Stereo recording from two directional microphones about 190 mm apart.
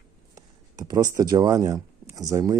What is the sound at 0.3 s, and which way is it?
Speech, 20° right (ahead or behind).